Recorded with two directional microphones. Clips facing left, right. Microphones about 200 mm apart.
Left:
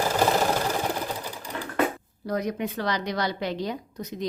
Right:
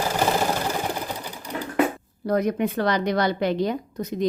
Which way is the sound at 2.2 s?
55° right (ahead or behind).